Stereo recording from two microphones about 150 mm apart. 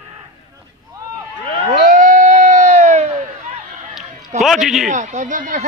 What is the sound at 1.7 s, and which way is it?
Crowd, 60° right (ahead or behind).